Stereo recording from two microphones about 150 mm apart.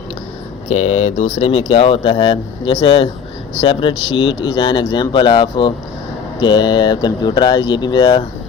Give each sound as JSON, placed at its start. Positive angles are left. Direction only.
{"t": 0.7, "sound": "speech", "side_deg": 45}